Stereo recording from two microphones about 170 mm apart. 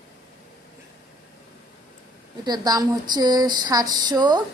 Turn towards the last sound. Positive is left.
turn(degrees=-25)  # may be behind; listen again after turning